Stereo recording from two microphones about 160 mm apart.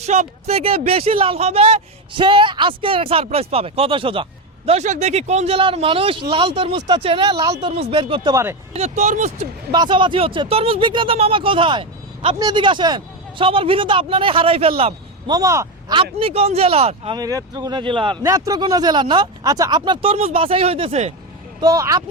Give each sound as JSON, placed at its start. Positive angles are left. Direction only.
{"t": 0.0, "sound": "speech", "side_deg": -45}
{"t": 7.4, "sound": "speech", "side_deg": -20}
{"t": 7.8, "sound": "speech", "side_deg": -35}
{"t": 8.7, "sound": "speech", "side_deg": -45}
{"t": 9.7, "sound": "speech", "side_deg": -30}
{"t": 15.3, "sound": "speech", "side_deg": -20}
{"t": 16.1, "sound": "speech", "side_deg": -40}
{"t": 17.2, "sound": "speech", "side_deg": -25}
{"t": 18.2, "sound": "speech", "side_deg": -20}
{"t": 21.6, "sound": "speech", "side_deg": -20}